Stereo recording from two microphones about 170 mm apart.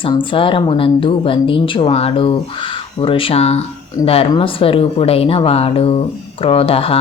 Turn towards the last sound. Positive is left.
turn(degrees=35)  # may be behind; listen again after turning